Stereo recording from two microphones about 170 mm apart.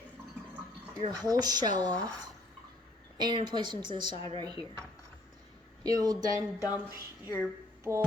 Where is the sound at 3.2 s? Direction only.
25° right (ahead or behind).